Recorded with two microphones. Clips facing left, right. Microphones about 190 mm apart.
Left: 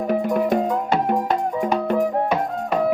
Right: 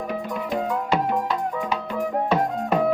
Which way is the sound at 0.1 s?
55° left (ahead or behind).